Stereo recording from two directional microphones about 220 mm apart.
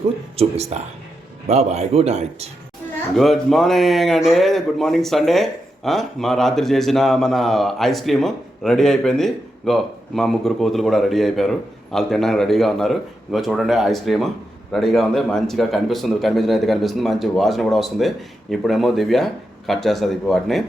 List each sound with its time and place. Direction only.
0.3 s speech: 30° right (ahead or behind)
3.2 s speech: centre (ahead or behind)